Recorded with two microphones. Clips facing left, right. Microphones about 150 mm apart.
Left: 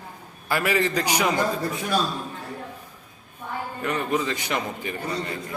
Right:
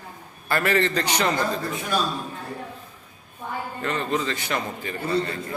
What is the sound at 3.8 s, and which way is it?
A man's voice, 15° left (ahead or behind).